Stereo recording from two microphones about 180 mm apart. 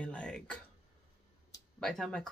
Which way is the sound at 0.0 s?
5° left (ahead or behind).